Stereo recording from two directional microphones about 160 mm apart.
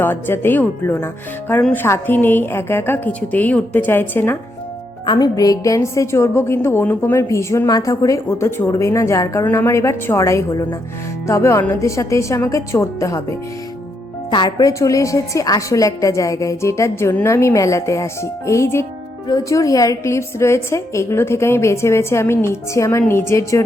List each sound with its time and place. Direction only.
0.0 s a woman's voice: 10° left (ahead or behind)
5.0 s a woman's voice: 25° left (ahead or behind)
14.3 s a woman's voice: 30° left (ahead or behind)